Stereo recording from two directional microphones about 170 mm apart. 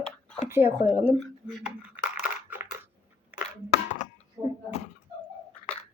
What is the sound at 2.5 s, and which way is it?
Crushing, 10° right (ahead or behind).